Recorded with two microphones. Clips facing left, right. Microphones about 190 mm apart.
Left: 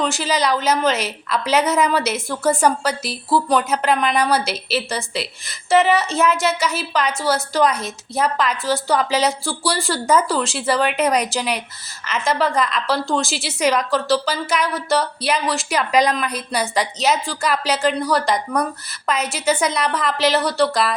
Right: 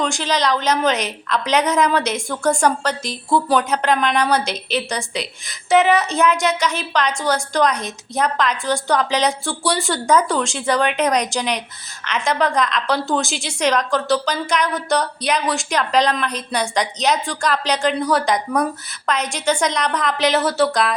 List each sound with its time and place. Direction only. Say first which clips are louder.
0.0 s a woman's voice: even; 5° left (ahead or behind)